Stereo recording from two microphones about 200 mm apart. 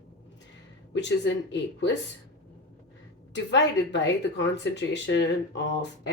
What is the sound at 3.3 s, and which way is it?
Speech, 60° left (ahead or behind).